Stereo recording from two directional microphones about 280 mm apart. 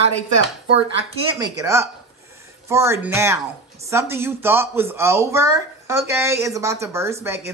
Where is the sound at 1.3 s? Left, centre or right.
Centre.